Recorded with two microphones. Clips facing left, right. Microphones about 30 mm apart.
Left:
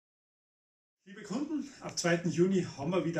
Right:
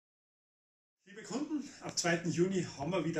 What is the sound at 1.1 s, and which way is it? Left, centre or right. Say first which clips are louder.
Speech: left 2 dB; centre.